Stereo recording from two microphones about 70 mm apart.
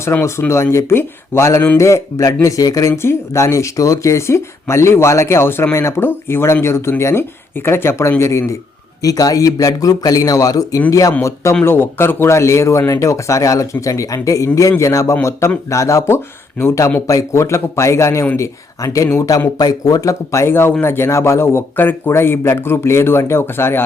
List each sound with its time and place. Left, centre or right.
0.1 s speech: left
9.0 s speech: left
11.2 s speech: left
19.5 s speech: left